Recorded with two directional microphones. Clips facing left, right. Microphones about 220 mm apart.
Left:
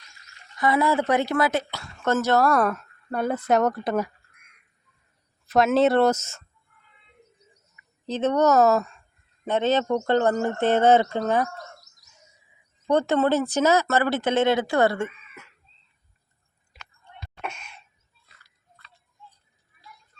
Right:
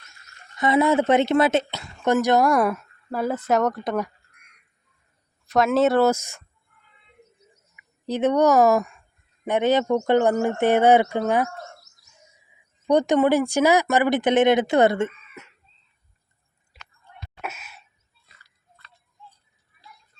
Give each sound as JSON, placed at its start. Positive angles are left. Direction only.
{"t": 0.5, "sound": "speech", "side_deg": -20}
{"t": 5.5, "sound": "speech", "side_deg": 0}
{"t": 7.8, "sound": "speech", "side_deg": -10}
{"t": 12.9, "sound": "speech", "side_deg": -15}
{"t": 17.4, "sound": "a sound", "side_deg": -5}